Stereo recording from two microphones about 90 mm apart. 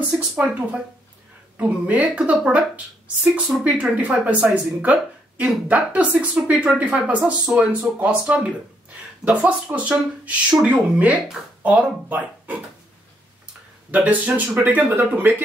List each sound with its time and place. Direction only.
0.4 s a woman's voice: 15° right (ahead or behind)
3.3 s a woman's voice: 10° right (ahead or behind)
13.9 s speech: 20° right (ahead or behind)